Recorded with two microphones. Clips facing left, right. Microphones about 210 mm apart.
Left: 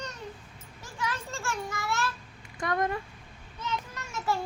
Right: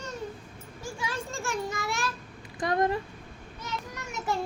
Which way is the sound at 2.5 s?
30° right (ahead or behind).